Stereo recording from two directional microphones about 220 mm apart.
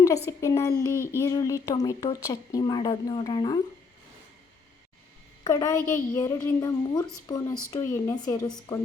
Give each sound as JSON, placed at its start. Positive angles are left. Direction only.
{"t": 0.3, "sound": "a woman's voice", "side_deg": 15}
{"t": 5.4, "sound": "a woman's voice", "side_deg": 15}